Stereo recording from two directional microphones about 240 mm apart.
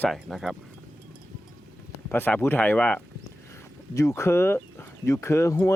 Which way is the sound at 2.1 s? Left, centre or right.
Centre.